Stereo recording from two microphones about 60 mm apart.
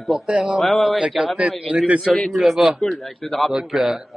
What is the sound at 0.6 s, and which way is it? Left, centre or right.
Speech, centre.